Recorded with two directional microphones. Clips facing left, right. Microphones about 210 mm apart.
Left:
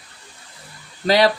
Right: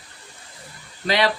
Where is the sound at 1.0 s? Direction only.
40° left (ahead or behind).